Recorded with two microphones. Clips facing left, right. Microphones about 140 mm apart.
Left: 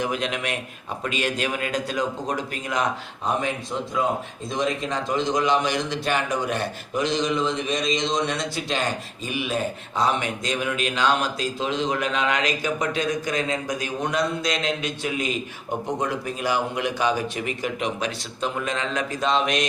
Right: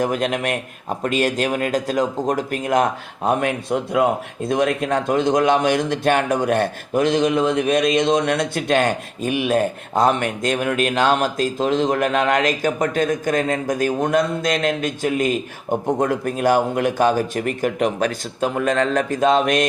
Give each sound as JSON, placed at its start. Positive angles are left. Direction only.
{"t": 0.0, "sound": "a man's voice", "side_deg": -45}